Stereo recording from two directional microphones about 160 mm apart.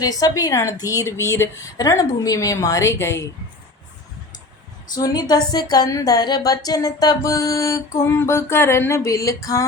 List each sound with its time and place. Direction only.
0.0 s a woman's voice: 25° left (ahead or behind)
4.9 s a woman's voice: 25° left (ahead or behind)